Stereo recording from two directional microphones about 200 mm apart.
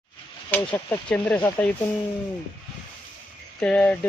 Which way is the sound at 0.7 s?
10° left (ahead or behind).